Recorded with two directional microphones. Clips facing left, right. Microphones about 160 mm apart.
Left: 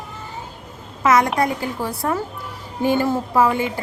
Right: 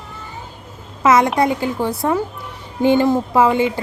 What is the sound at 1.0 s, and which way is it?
Speech, 25° right (ahead or behind).